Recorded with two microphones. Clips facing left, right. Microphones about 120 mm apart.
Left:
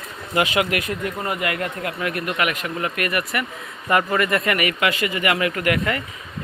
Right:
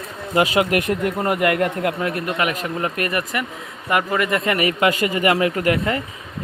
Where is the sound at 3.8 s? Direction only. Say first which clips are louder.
Even; 10° right (ahead or behind); by 4.9 s 30° right (ahead or behind).